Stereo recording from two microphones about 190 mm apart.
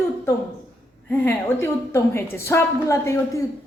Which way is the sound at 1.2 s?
10° left (ahead or behind).